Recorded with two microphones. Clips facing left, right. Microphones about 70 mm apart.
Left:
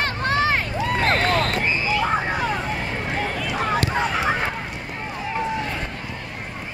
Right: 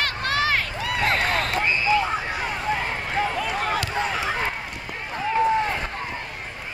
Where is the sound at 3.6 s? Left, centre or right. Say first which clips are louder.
Left 7 dB; left.